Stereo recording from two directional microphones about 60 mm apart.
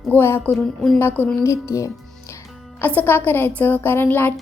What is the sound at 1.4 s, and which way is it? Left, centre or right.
Speech, left.